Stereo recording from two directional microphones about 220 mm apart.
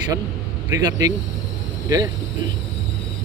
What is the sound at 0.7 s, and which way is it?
Speech, 15° right (ahead or behind).